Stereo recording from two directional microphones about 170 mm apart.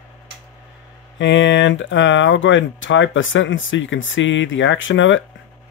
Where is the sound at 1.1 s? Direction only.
90° left.